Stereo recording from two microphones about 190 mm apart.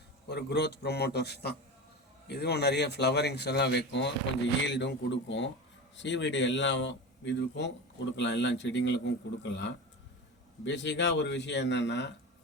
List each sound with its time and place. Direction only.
0.3 s a man's voice: 60° left (ahead or behind)